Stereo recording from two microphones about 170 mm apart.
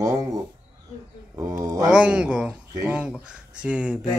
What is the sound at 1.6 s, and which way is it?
Speech, 20° right (ahead or behind).